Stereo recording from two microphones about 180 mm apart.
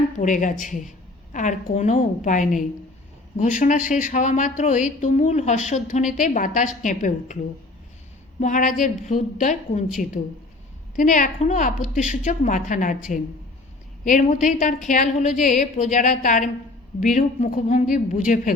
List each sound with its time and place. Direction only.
0.2 s speech: 45° left (ahead or behind)
8.4 s speech: 45° left (ahead or behind)
14.0 s speech: 45° left (ahead or behind)